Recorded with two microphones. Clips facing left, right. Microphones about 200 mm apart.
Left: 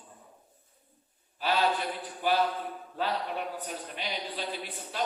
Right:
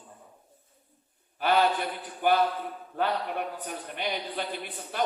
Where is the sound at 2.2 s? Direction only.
55° right (ahead or behind).